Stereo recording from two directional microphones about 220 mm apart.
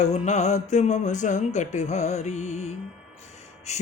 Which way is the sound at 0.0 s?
30° left (ahead or behind).